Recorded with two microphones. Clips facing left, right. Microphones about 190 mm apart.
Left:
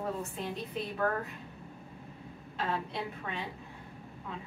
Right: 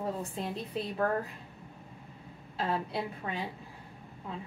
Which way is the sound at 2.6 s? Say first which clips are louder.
Right 2 dB; 35° right (ahead or behind).